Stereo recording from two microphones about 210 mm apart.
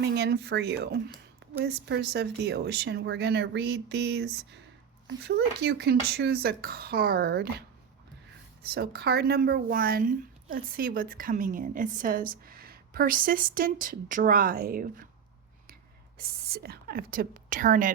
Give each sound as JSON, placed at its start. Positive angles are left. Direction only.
{"t": 0.0, "sound": "speech", "side_deg": -50}
{"t": 8.6, "sound": "speech", "side_deg": -50}
{"t": 16.1, "sound": "speech", "side_deg": -45}